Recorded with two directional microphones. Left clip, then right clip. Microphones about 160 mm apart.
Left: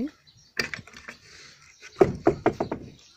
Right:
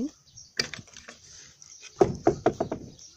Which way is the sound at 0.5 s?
35° left (ahead or behind).